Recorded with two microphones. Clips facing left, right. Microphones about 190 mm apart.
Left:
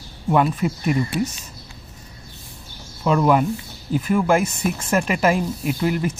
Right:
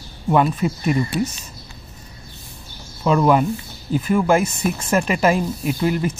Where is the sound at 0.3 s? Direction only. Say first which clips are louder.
Right 1 dB; 25° right (ahead or behind).